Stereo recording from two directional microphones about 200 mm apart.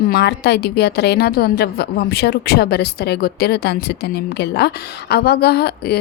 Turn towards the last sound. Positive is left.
turn(degrees=55)  # may be behind; listen again after turning